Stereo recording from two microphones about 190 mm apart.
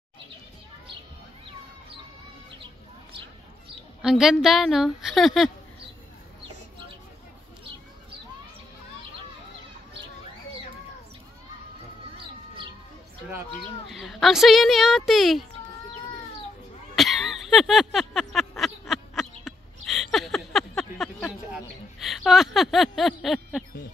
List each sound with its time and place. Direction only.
4.0 s a woman's voice: centre (ahead or behind)
13.5 s a woman's voice: centre (ahead or behind)
16.9 s a sound: centre (ahead or behind)